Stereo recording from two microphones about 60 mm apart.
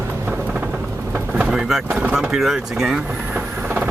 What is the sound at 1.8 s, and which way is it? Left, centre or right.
Speech, right.